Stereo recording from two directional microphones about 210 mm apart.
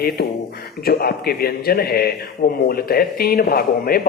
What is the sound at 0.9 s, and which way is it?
Speech, 45° left (ahead or behind).